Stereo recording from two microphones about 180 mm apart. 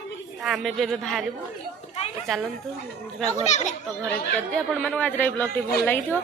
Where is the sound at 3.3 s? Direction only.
40° left (ahead or behind).